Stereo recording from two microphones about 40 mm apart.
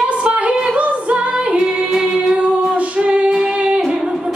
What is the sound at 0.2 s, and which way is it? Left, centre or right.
Music, right.